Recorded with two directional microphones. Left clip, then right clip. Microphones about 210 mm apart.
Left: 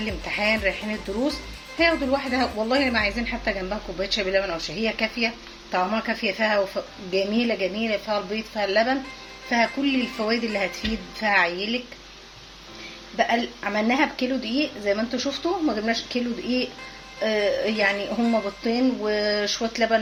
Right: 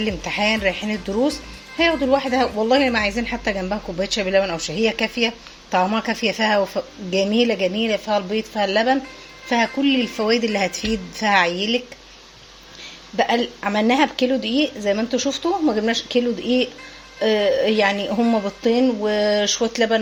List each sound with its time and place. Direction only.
0.0 s a woman's voice: 50° right (ahead or behind)
13.1 s a woman's voice: 50° right (ahead or behind)